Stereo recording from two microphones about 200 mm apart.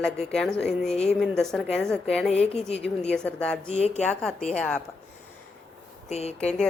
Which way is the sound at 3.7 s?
30° left (ahead or behind).